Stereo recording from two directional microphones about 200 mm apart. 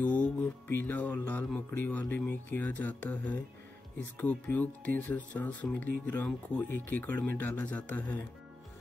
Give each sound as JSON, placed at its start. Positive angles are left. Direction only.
{"t": 0.0, "sound": "speech", "side_deg": 5}